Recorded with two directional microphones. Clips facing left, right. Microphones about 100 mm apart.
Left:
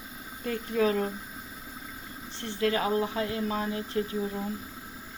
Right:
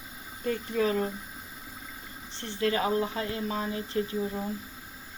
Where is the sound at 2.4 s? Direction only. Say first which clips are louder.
Even; centre (ahead or behind).